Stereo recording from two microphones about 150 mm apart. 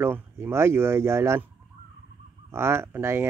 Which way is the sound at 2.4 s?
15° right (ahead or behind).